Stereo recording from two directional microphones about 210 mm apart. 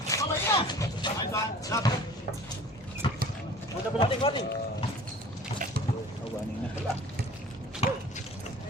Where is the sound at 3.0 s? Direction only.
20° left (ahead or behind).